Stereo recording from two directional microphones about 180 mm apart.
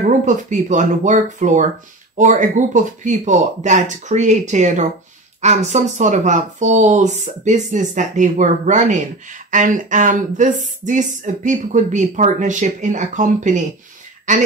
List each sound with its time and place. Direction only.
0.0 s speech: 45° right (ahead or behind)